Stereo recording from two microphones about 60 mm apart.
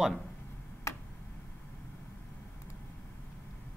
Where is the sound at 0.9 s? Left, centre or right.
Left.